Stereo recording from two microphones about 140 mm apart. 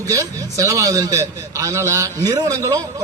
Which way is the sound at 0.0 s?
25° right (ahead or behind).